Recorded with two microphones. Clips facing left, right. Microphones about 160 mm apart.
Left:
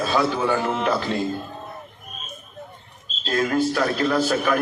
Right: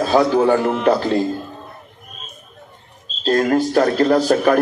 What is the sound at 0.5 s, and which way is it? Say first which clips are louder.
Speech: right 6 dB; 65° right (ahead or behind).